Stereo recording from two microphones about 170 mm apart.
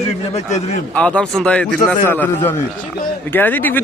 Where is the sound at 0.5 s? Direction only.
40° left (ahead or behind).